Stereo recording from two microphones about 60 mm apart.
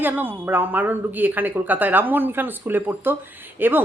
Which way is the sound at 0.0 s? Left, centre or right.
Right.